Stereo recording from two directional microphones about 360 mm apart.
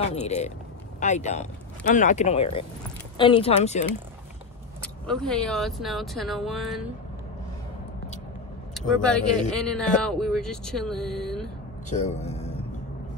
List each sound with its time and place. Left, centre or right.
0.0 s speech: centre
4.8 s speech: centre
8.7 s speech: centre
11.9 s speech: centre